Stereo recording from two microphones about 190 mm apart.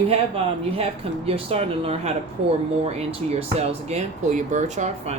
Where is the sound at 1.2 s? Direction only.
30° right (ahead or behind).